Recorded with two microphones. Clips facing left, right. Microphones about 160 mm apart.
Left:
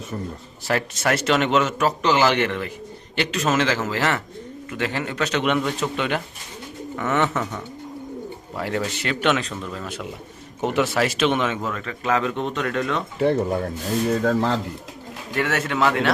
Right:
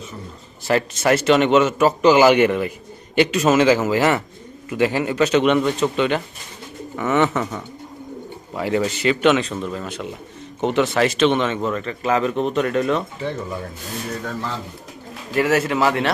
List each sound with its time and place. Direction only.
0.7 s a man's voice: centre (ahead or behind)
13.1 s speech: 60° left (ahead or behind)
14.3 s speech: 90° left
15.4 s speech: 5° right (ahead or behind)